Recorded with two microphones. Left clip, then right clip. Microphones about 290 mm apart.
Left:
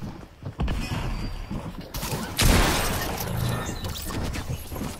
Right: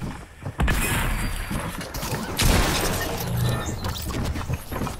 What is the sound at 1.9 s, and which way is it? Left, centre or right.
Music, centre.